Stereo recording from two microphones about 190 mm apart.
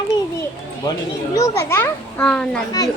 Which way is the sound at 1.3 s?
15° left (ahead or behind).